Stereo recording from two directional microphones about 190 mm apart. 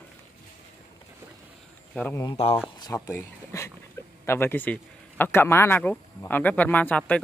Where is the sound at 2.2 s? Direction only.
30° left (ahead or behind).